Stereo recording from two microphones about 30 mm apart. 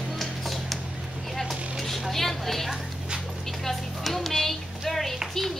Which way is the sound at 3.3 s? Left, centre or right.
Centre.